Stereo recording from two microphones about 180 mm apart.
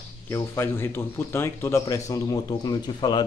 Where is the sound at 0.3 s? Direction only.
15° left (ahead or behind).